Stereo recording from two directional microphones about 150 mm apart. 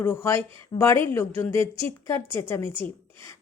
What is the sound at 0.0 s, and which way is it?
A woman's voice, 15° left (ahead or behind).